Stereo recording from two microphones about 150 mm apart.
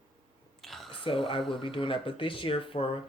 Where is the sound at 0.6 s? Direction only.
Centre (ahead or behind).